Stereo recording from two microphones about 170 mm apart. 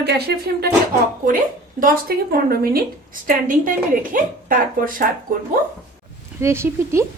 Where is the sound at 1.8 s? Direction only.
60° right (ahead or behind).